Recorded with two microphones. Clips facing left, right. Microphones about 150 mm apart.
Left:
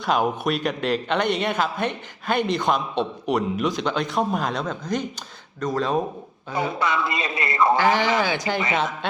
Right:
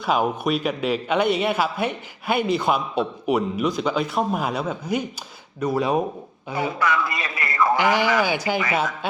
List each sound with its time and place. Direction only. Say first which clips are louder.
0.0 s a man's voice: even; 5° right (ahead or behind)
6.7 s a man's voice: right 1 dB; 25° left (ahead or behind)
7.8 s speech: even; 15° right (ahead or behind)